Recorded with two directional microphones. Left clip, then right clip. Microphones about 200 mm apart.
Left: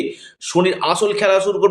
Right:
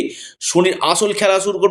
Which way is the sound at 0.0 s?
30° right (ahead or behind).